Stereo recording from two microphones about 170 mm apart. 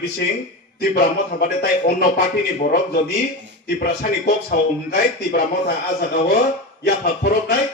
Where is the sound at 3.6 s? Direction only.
65° left (ahead or behind).